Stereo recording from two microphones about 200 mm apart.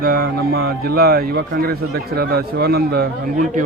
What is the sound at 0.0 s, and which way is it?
Speech, 50° right (ahead or behind).